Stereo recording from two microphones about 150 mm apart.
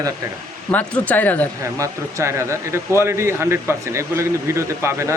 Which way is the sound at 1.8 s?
20° right (ahead or behind).